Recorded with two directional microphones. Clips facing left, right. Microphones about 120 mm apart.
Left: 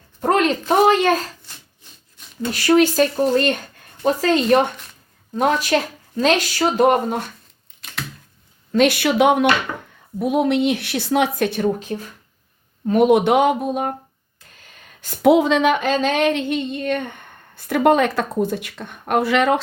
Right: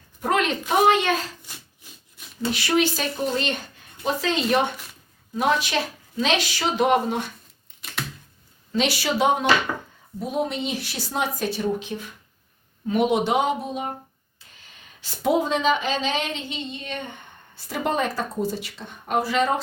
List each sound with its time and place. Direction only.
0.2 s a sound: 40° left (ahead or behind)
0.9 s speech: 40° left (ahead or behind)
2.5 s speech: 45° left (ahead or behind)
8.7 s speech: 55° left (ahead or behind)
9.7 s chopping: 10° right (ahead or behind)
10.2 s speech: 65° left (ahead or behind)
14.3 s a sound: 50° left (ahead or behind)
15.3 s speech: 80° left